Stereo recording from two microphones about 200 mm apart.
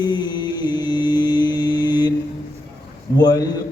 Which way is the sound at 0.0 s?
20° left (ahead or behind).